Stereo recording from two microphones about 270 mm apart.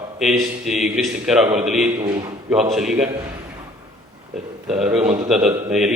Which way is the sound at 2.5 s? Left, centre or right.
Centre.